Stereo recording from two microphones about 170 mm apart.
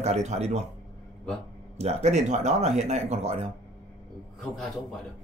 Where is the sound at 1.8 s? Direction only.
40° right (ahead or behind).